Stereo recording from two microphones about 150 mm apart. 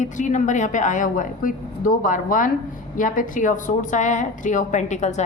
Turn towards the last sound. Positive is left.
turn(degrees=50)  # may be behind; listen again after turning